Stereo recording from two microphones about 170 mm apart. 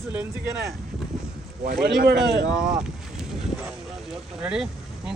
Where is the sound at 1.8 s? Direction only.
80° right.